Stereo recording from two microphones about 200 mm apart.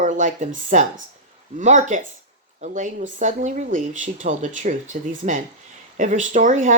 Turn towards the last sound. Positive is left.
turn(degrees=-40)  # may be behind; listen again after turning